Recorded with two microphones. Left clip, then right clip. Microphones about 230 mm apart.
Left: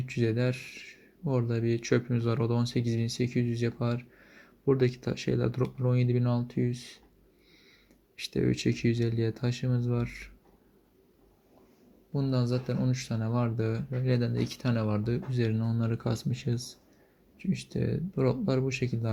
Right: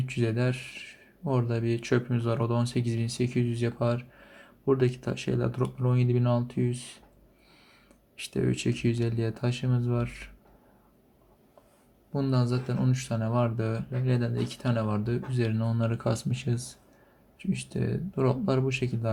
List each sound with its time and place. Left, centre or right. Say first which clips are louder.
0.0 s speech: even; centre
8.1 s speech: even; left
12.1 s speech: right 2 dB; centre